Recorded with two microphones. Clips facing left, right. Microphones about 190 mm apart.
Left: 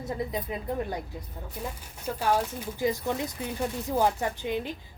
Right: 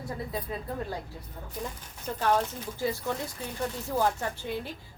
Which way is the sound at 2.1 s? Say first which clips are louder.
Even; 10° left (ahead or behind).